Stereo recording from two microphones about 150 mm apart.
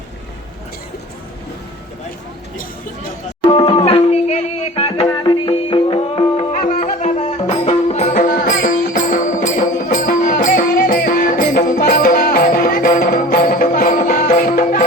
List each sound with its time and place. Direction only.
3.5 s music: 35° left (ahead or behind)
5.1 s music: 30° left (ahead or behind)
6.6 s music: 65° left (ahead or behind)